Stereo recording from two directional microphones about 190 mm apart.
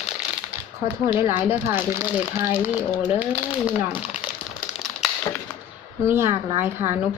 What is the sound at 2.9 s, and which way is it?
Speech, 20° left (ahead or behind).